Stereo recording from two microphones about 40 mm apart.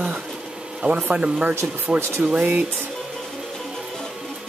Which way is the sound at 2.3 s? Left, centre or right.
Right.